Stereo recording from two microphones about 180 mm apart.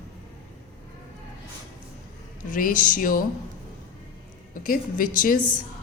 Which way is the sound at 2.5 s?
50° left (ahead or behind).